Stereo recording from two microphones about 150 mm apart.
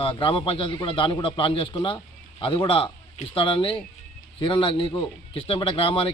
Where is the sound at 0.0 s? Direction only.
35° left (ahead or behind).